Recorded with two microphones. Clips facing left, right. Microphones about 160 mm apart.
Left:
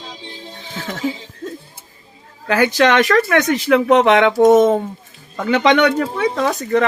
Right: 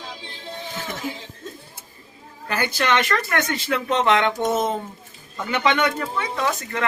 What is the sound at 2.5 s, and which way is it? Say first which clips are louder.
Speech: left 8 dB; 80° left.